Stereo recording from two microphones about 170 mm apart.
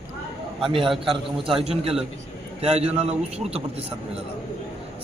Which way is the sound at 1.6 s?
35° right (ahead or behind).